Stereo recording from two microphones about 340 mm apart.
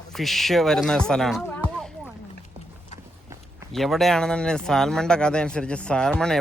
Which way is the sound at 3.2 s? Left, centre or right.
Centre.